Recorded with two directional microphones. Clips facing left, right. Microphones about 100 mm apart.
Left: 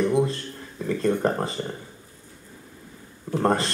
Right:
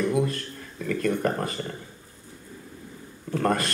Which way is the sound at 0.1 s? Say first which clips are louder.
Left 3 dB; 25° left (ahead or behind).